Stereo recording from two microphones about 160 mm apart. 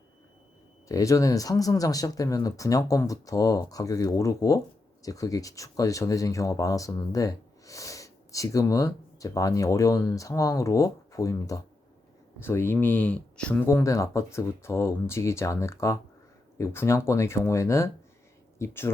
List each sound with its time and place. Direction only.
0.9 s speech: 20° left (ahead or behind)